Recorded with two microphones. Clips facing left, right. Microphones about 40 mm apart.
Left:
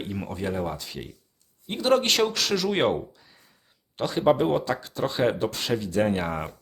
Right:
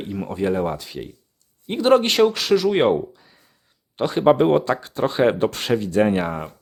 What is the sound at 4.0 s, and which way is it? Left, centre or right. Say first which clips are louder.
Speech: right 5 dB; right.